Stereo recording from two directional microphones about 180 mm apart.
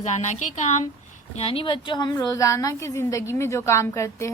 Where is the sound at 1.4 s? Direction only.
30° left (ahead or behind).